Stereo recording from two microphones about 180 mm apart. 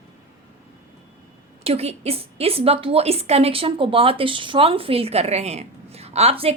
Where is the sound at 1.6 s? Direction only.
35° right (ahead or behind).